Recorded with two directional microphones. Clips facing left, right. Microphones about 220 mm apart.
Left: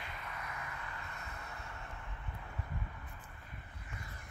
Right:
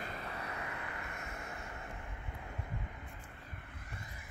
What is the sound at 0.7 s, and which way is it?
Vehicle, 65° right (ahead or behind).